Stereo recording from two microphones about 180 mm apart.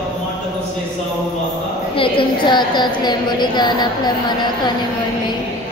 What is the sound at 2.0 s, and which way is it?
A woman's voice, 25° left (ahead or behind).